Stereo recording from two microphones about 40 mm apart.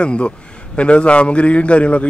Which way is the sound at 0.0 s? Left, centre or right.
Left.